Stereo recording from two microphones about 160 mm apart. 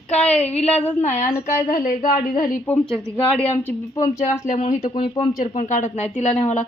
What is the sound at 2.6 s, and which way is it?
A woman's voice, 10° left (ahead or behind).